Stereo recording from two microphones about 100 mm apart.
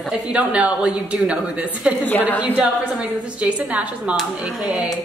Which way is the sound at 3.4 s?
15° right (ahead or behind).